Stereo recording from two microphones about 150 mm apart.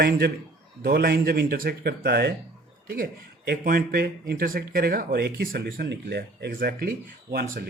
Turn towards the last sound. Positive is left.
turn(degrees=-90)